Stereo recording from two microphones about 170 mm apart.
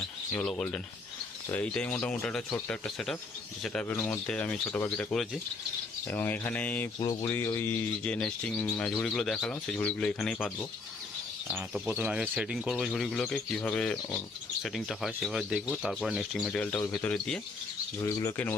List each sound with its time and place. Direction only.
0.3 s speech: 5° left (ahead or behind)
6.1 s speech: 10° left (ahead or behind)
7.0 s speech: 20° left (ahead or behind); by 10.5 s 5° left (ahead or behind)
11.4 s speech: 10° right (ahead or behind)
18.0 s speech: 20° left (ahead or behind)